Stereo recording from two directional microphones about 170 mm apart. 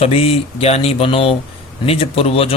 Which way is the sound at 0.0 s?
35° left (ahead or behind).